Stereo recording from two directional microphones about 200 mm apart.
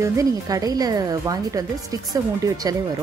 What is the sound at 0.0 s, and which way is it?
A woman's voice, 15° right (ahead or behind).